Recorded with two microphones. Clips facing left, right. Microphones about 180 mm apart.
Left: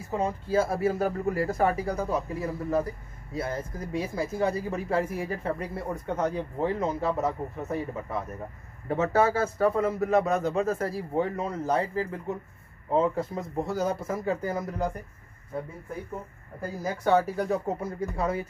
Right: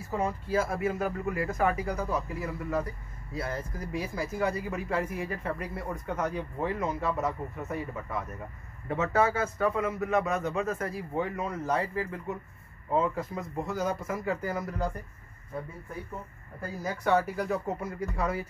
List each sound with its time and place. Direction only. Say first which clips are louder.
0.1 s a man's voice: left 3 dB; 20° left (ahead or behind)
16.6 s speech: left 3 dB; 25° left (ahead or behind)